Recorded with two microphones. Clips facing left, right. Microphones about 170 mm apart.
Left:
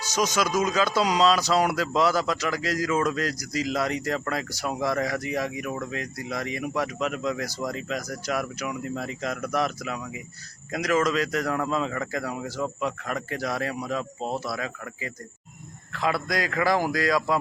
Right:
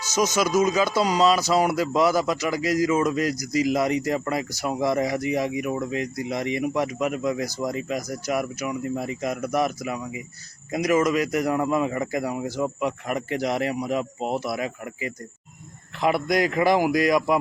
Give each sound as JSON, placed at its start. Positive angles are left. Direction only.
{"t": 0.4, "sound": "speech", "side_deg": -10}